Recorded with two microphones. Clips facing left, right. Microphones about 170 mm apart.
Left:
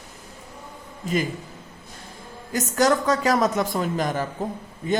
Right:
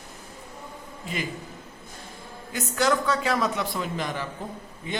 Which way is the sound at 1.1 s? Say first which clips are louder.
Left 9 dB; 40° left (ahead or behind).